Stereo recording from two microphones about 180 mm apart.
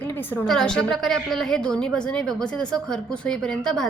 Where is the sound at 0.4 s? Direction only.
5° left (ahead or behind).